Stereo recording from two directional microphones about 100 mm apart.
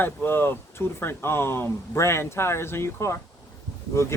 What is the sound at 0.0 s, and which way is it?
Speech, 20° left (ahead or behind).